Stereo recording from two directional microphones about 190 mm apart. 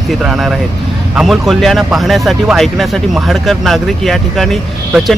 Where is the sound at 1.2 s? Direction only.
Centre (ahead or behind).